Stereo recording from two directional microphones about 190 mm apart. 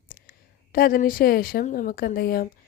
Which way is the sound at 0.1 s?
50° left (ahead or behind).